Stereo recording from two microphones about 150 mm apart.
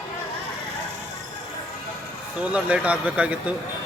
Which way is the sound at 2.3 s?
10° right (ahead or behind).